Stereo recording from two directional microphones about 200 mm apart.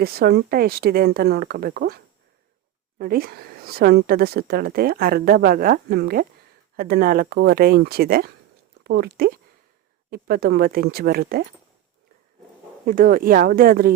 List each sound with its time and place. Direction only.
0.0 s speech: 50° right (ahead or behind)
3.0 s speech: 50° right (ahead or behind)
12.8 s speech: 45° right (ahead or behind)